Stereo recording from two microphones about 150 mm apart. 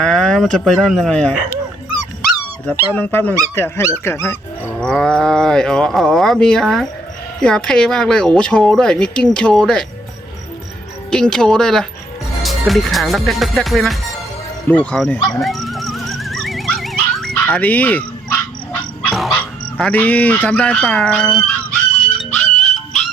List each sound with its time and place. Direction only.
0.0 s speech: 5° left (ahead or behind)
2.6 s speech: 10° left (ahead or behind)
4.8 s speech: 5° left (ahead or behind)
11.1 s speech: 5° left (ahead or behind)
15.4 s horse: centre (ahead or behind)
17.4 s dog: 10° left (ahead or behind)
19.3 s honk: 10° left (ahead or behind)
22.2 s music: centre (ahead or behind)